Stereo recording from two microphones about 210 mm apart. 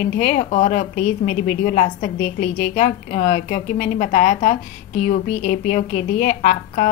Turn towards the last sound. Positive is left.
turn(degrees=35)  # may be behind; listen again after turning